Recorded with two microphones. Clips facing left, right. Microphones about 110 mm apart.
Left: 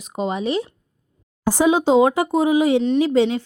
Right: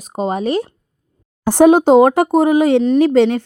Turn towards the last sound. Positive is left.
turn(degrees=-65)  # may be behind; listen again after turning